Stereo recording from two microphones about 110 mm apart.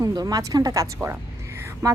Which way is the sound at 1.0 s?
25° right (ahead or behind).